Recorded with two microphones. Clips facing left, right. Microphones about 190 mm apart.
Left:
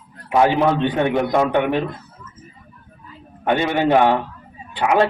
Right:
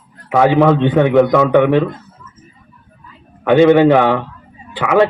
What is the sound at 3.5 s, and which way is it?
A man's voice, 65° right (ahead or behind).